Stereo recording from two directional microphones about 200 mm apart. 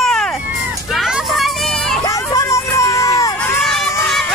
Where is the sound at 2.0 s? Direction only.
15° left (ahead or behind).